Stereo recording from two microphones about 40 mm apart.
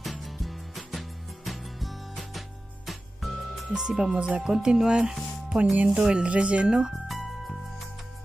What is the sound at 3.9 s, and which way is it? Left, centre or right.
Speech, centre.